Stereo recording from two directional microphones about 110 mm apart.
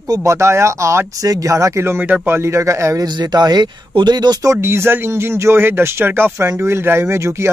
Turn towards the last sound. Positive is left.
turn(degrees=-25)  # may be behind; listen again after turning